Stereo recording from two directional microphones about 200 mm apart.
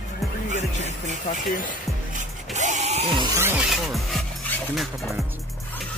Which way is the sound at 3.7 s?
Centre (ahead or behind).